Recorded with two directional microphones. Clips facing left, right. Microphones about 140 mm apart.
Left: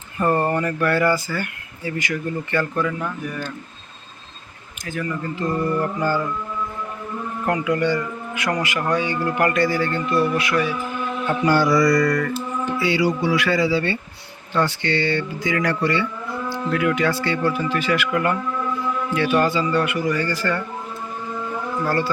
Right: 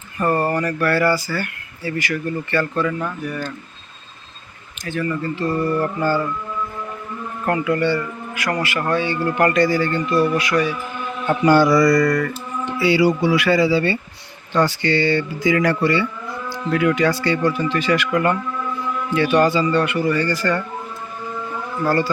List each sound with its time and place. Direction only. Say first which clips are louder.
0.3 s speech: right 1 dB; 20° left (ahead or behind)
4.9 s speech: right 4 dB; 10° left (ahead or behind)
7.4 s speech: right 2 dB; 15° left (ahead or behind)
11.5 s mantra: right 4 dB; 55° right (ahead or behind)
11.8 s music: right 2 dB; 30° right (ahead or behind)
12.8 s speech: right 5 dB; 10° right (ahead or behind); by 20.2 s 10° left (ahead or behind)
20.4 s speech: right 3 dB; centre (ahead or behind)
21.8 s speech: right 4 dB; centre (ahead or behind)